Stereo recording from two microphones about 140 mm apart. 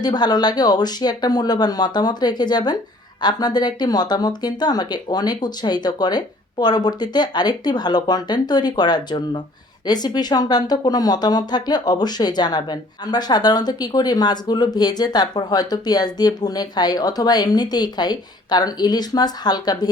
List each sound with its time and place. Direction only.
0.0 s speech: 30° left (ahead or behind)